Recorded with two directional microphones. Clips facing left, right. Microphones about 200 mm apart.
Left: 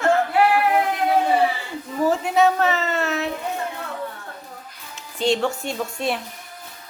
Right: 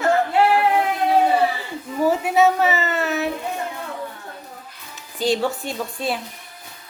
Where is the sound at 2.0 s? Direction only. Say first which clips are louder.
Right 1 dB; 5° right (ahead or behind).